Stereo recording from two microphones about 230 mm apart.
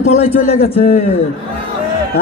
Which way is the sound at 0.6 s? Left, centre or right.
Left.